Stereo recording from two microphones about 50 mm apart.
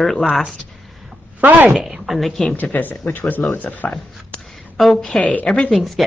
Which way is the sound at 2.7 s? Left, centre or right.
Left.